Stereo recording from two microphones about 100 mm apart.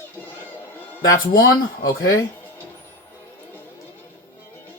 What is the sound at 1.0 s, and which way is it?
Speech, 35° left (ahead or behind).